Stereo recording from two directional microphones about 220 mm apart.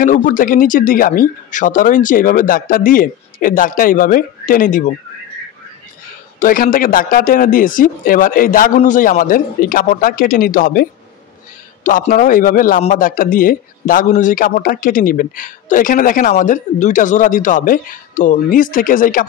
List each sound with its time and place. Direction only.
0.0 s a man's voice: 35° left (ahead or behind)
6.4 s a man's voice: 40° left (ahead or behind)